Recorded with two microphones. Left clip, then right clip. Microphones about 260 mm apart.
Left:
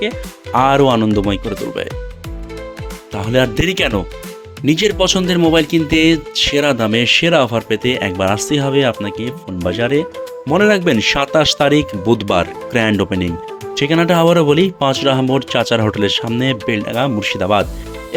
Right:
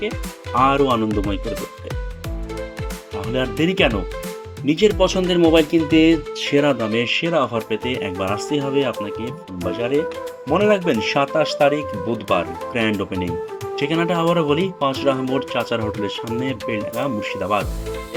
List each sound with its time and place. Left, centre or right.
0.5 s speech: left
3.2 s speech: left